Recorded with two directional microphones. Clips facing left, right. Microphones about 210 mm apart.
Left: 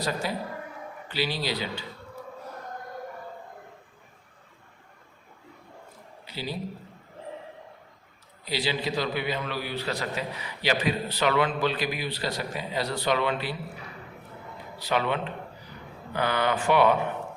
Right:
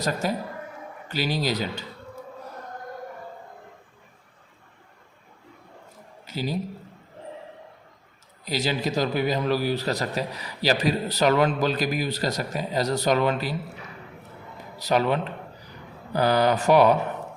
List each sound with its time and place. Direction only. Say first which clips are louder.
0.0 s speech: right 3 dB; 45° right (ahead or behind)
6.2 s a man's voice: right 6 dB; 45° right (ahead or behind)
8.4 s a man's voice: right 3 dB; 45° right (ahead or behind)
14.8 s a man's voice: right 4 dB; 40° right (ahead or behind)